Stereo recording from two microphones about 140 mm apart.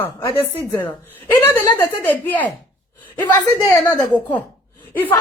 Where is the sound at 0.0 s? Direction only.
15° left (ahead or behind).